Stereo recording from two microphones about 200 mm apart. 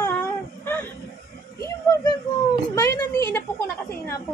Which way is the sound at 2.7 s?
15° left (ahead or behind).